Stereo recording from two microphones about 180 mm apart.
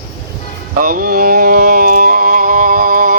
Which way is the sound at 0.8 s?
50° right (ahead or behind).